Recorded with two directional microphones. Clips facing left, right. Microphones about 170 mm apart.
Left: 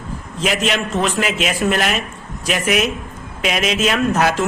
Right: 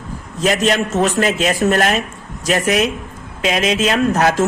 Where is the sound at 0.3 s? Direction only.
40° right (ahead or behind).